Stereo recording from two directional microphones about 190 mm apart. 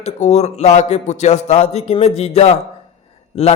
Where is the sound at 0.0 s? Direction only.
35° left (ahead or behind).